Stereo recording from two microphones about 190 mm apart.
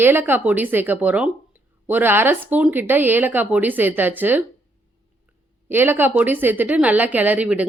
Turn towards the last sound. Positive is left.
turn(degrees=-5)  # may be behind; listen again after turning